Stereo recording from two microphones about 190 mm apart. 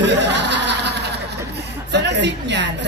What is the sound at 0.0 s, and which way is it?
Snicker, 65° right (ahead or behind).